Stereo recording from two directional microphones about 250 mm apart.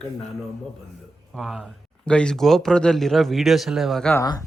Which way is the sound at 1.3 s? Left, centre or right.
Centre.